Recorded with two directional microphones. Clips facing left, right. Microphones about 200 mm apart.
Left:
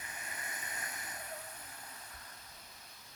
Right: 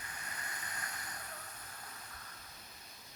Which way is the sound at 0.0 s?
20° left (ahead or behind).